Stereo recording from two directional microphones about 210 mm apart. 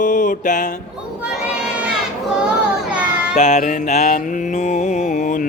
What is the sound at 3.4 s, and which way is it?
Mantra, 30° left (ahead or behind).